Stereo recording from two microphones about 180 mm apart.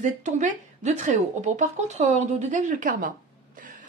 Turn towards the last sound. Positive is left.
turn(degrees=-45)  # may be behind; listen again after turning